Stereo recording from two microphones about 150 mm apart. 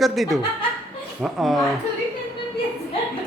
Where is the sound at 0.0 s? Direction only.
Centre (ahead or behind).